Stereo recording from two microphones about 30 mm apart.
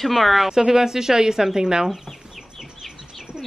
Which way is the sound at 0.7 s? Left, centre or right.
Centre.